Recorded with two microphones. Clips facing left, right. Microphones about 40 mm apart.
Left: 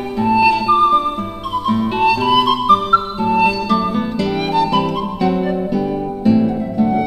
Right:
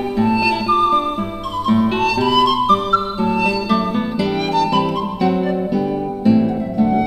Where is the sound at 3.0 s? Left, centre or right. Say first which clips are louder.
Left 3 dB; centre.